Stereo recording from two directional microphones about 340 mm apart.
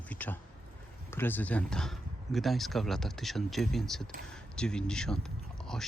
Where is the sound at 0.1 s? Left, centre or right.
Centre.